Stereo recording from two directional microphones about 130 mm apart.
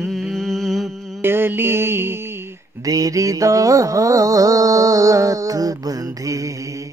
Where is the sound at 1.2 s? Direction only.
15° right (ahead or behind).